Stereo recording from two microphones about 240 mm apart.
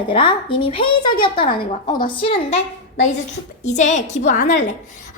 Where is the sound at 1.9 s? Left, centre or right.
Centre.